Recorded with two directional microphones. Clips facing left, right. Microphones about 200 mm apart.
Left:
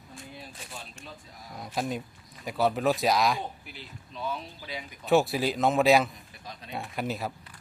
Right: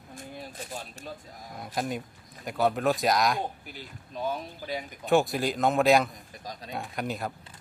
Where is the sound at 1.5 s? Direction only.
Centre (ahead or behind).